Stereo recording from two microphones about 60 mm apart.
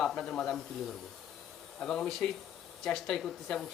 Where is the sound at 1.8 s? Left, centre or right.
Centre.